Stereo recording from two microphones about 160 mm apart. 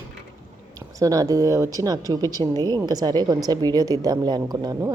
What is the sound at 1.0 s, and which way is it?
A woman's voice, 20° right (ahead or behind).